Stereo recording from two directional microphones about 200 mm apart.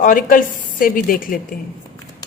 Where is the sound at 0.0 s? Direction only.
40° left (ahead or behind).